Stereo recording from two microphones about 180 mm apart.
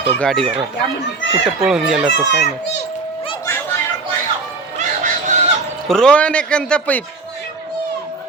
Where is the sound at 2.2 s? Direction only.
70° left (ahead or behind).